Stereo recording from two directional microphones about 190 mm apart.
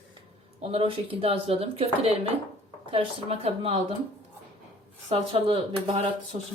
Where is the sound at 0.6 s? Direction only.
30° right (ahead or behind).